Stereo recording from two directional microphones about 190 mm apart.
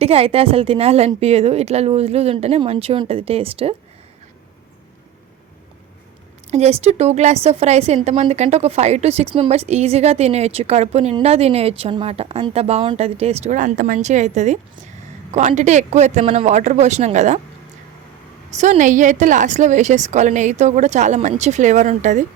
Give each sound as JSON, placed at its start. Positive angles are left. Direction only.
{"t": 0.0, "sound": "a woman's voice", "side_deg": -30}
{"t": 6.5, "sound": "a woman's voice", "side_deg": -35}
{"t": 18.5, "sound": "a woman's voice", "side_deg": -40}